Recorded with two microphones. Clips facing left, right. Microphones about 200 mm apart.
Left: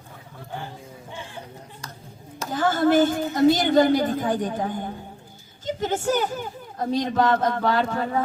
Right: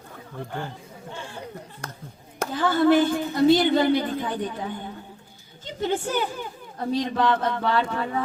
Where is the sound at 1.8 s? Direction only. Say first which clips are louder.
Right 3 dB; 55° right (ahead or behind).